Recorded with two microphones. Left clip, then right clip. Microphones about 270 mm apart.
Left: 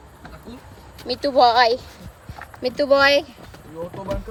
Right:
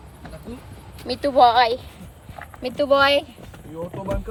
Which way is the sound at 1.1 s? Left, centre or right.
Centre.